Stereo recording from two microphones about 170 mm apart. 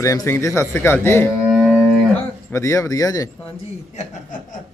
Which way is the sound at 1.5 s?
5° right (ahead or behind).